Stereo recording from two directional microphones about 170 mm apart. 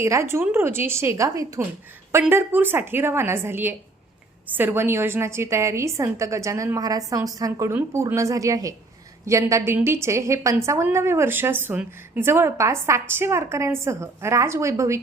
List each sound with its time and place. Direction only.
0.0 s a woman's voice: 15° right (ahead or behind)